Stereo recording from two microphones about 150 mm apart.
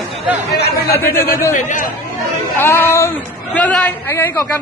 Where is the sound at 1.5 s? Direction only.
60° left (ahead or behind).